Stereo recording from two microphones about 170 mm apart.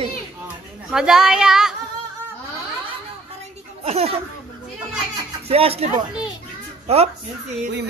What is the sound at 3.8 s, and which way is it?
Speech, 35° right (ahead or behind).